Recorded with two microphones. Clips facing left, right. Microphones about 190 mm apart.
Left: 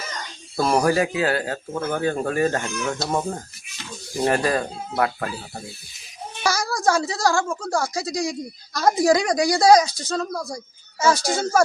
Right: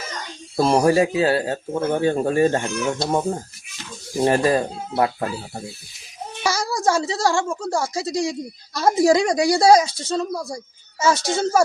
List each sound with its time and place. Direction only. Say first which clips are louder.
0.5 s speech: right 3 dB; 25° right (ahead or behind)
6.4 s a sound: even; 25° right (ahead or behind)
6.8 s speech: even; 25° right (ahead or behind)
7.4 s speech: right 1 dB; 5° right (ahead or behind)
7.8 s speech: right 2 dB; 25° right (ahead or behind)
10.2 s speech: right 2 dB; 5° right (ahead or behind)
11.1 s speech: right 1 dB; 25° right (ahead or behind)